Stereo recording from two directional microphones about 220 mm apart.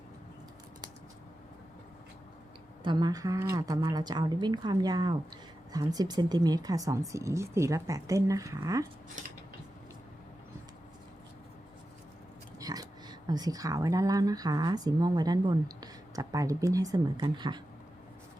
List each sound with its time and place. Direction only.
2.8 s a woman's voice: 20° right (ahead or behind)
12.5 s speech: 15° right (ahead or behind)